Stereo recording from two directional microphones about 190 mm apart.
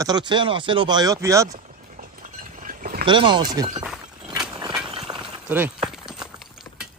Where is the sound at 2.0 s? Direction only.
45° right (ahead or behind).